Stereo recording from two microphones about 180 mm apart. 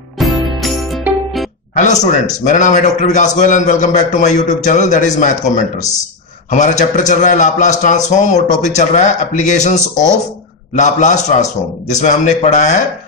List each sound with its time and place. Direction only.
0.2 s music: centre (ahead or behind)
1.8 s a man's voice: 40° left (ahead or behind)